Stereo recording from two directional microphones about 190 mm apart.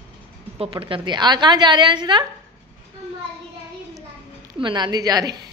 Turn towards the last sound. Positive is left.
turn(degrees=-20)  # may be behind; listen again after turning